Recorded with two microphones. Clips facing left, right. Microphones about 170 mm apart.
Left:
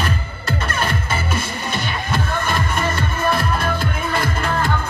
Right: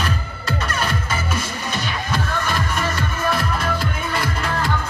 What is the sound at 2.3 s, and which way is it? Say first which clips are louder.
Music: left 2 dB; 55° left (ahead or behind).